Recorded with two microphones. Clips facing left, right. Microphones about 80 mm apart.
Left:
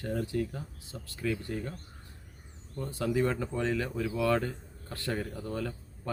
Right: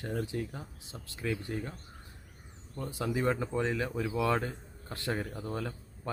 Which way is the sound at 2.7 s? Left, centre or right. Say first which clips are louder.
Left 3 dB; centre.